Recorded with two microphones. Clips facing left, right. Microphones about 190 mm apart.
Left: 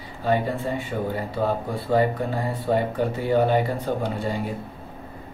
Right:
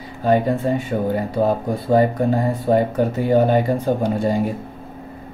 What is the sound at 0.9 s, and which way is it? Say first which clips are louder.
Speech: right 6 dB; 50° right (ahead or behind).